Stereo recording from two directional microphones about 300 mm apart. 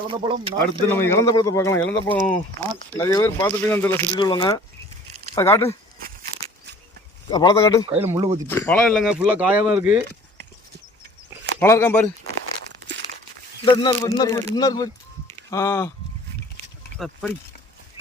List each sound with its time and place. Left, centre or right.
0.1 s speech: centre
1.0 s speech: centre
7.3 s speech: centre
7.9 s speech: centre
8.4 s speech: centre
11.6 s speech: centre
13.7 s speech: centre
17.0 s speech: centre